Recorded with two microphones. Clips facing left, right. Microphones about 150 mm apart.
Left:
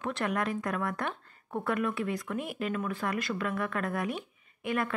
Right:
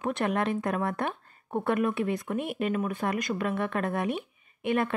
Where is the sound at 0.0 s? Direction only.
20° right (ahead or behind).